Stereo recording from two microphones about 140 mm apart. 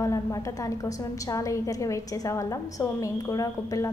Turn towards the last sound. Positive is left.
turn(degrees=25)  # may be behind; listen again after turning